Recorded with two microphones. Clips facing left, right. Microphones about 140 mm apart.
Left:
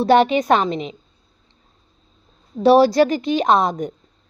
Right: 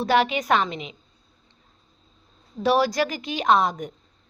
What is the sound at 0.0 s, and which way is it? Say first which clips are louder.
Speech: left 7 dB; 35° left (ahead or behind).